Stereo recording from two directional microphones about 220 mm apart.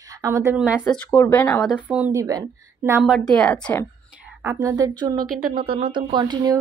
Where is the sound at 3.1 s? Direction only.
5° left (ahead or behind).